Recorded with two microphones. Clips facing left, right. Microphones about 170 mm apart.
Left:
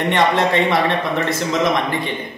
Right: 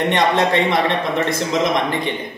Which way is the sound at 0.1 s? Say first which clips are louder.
Left 2 dB; 20° right (ahead or behind).